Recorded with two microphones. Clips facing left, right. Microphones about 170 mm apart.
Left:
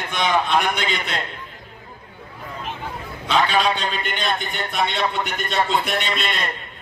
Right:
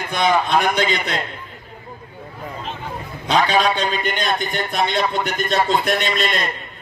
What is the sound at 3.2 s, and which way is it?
A man's voice, 40° right (ahead or behind).